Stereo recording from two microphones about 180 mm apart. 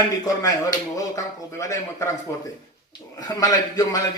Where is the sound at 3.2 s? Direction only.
20° left (ahead or behind).